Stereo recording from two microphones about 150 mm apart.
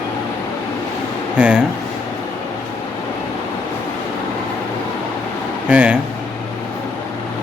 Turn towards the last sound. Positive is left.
turn(degrees=-10)  # may be behind; listen again after turning